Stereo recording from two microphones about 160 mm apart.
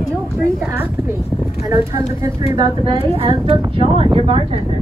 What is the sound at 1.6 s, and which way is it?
A woman's voice, 20° right (ahead or behind).